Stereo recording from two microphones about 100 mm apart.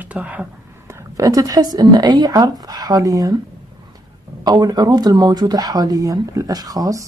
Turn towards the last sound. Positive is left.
turn(degrees=-35)  # may be behind; listen again after turning